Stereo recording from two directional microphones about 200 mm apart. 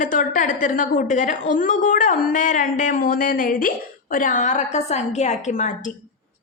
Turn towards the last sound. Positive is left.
turn(degrees=35)  # may be behind; listen again after turning